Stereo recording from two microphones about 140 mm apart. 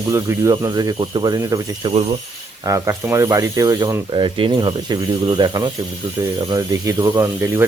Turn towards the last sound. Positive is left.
turn(degrees=-20)  # may be behind; listen again after turning